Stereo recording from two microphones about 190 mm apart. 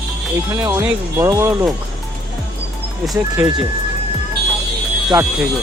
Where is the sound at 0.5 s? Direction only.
15° right (ahead or behind).